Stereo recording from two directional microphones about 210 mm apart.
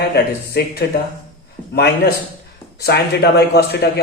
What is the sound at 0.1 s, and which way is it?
A man's voice, 50° left (ahead or behind).